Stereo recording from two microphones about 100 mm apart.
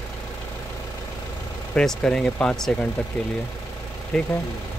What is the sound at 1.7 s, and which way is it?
Speech, 5° left (ahead or behind).